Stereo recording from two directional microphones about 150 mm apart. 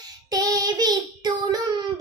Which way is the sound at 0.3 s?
25° right (ahead or behind).